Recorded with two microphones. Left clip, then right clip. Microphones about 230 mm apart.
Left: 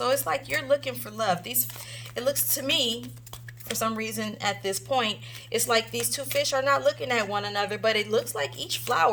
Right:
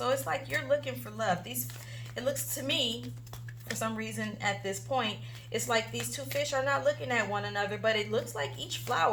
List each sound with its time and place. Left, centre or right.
0.0 s a woman's voice: left